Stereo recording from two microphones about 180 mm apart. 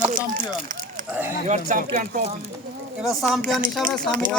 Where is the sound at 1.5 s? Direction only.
45° right (ahead or behind).